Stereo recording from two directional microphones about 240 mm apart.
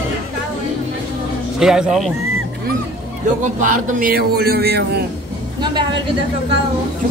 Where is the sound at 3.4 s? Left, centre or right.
Right.